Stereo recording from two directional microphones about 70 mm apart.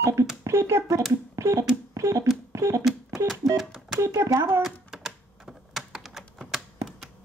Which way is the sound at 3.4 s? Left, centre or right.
Right.